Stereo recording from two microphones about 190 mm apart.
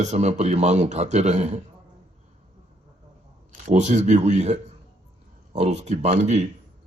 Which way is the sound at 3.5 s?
40° right (ahead or behind).